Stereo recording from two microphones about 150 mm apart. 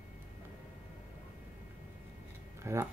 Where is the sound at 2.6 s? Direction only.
20° right (ahead or behind).